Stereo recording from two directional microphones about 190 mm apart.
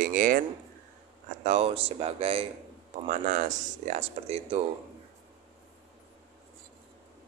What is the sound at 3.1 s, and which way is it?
Speech, 45° right (ahead or behind).